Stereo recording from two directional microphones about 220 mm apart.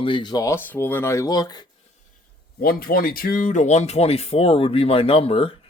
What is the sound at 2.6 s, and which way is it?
Speech, 45° left (ahead or behind).